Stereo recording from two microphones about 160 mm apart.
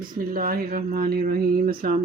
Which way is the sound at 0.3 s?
65° right (ahead or behind).